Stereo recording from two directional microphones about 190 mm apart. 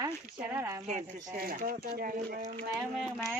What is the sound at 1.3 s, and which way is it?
Speech, 50° right (ahead or behind).